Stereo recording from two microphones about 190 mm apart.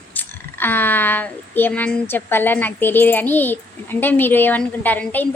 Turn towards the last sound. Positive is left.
turn(degrees=10)  # may be behind; listen again after turning